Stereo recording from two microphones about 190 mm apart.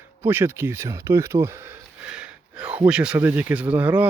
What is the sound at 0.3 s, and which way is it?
Speech, 10° right (ahead or behind).